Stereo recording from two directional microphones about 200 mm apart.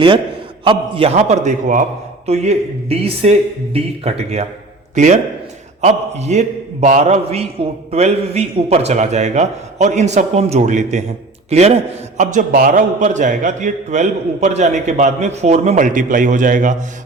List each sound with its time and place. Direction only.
0.6 s a man's voice: 25° right (ahead or behind)